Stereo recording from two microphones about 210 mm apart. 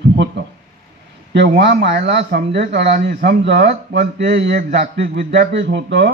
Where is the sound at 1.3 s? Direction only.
55° right (ahead or behind).